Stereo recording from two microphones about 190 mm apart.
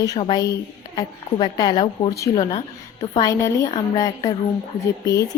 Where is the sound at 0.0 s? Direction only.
20° left (ahead or behind).